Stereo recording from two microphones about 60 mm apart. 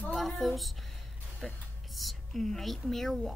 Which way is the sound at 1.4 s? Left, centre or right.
Centre.